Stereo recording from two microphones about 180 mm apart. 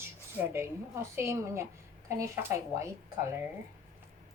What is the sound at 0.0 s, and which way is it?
A woman's voice, 15° right (ahead or behind).